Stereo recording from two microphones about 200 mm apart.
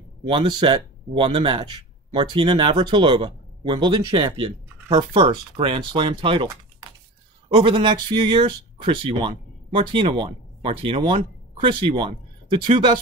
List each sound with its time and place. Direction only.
0.3 s speech: 25° right (ahead or behind)